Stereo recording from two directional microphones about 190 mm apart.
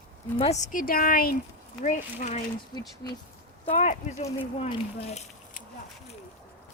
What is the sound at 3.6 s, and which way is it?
Speech, 40° left (ahead or behind).